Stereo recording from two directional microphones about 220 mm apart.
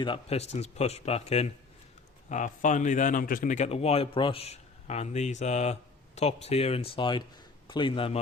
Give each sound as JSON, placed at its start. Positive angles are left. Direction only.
{"t": 0.0, "sound": "a man's voice", "side_deg": 25}